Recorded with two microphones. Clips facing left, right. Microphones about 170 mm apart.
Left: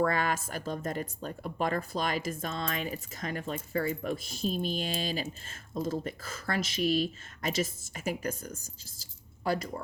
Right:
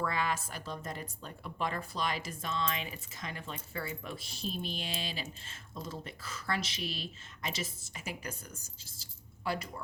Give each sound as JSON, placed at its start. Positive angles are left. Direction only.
{"t": 0.0, "sound": "a woman's voice", "side_deg": 50}